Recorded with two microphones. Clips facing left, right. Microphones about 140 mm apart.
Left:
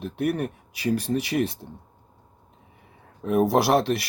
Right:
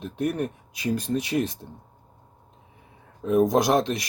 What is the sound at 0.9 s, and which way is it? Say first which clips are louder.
Speech: even; 10° left (ahead or behind).